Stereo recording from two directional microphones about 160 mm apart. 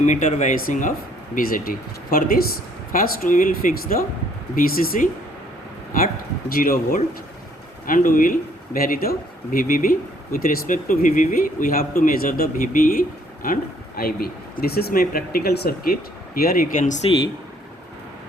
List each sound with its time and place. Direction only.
0.0 s speech: 50° left (ahead or behind)
1.4 s speech: 65° left (ahead or behind)
6.5 s speech: 65° left (ahead or behind)